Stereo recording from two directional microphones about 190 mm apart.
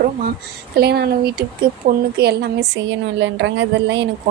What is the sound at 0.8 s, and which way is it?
Speech, 55° right (ahead or behind).